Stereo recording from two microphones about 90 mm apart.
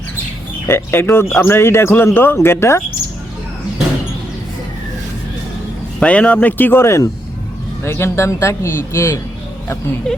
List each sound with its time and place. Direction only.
0.7 s speech: 25° left (ahead or behind)
6.0 s speech: 15° left (ahead or behind); by 9.2 s 30° left (ahead or behind)
10.1 s speech: 5° left (ahead or behind)